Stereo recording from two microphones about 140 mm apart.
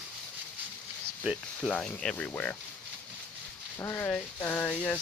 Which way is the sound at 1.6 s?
5° left (ahead or behind).